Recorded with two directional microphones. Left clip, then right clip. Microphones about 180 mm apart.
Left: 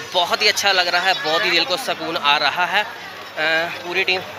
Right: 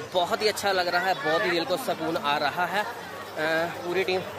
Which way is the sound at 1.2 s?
25° left (ahead or behind).